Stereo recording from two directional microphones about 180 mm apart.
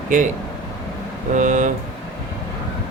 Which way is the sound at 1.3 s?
45° right (ahead or behind).